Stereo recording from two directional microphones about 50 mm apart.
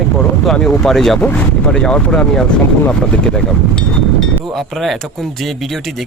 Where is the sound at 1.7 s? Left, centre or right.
Centre.